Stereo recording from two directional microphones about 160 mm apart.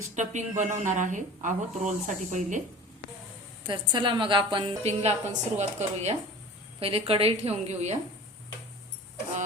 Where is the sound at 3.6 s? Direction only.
30° right (ahead or behind).